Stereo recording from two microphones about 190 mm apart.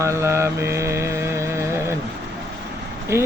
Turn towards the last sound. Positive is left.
turn(degrees=-15)  # may be behind; listen again after turning